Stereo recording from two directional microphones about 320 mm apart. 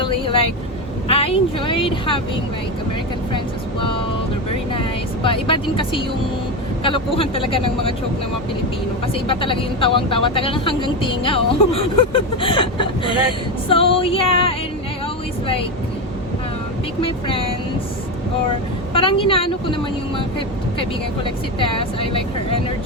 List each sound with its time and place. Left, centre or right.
0.0 s speech: centre
5.2 s speech: centre
9.2 s speech: centre
17.0 s speech: centre
18.9 s speech: centre
21.2 s speech: centre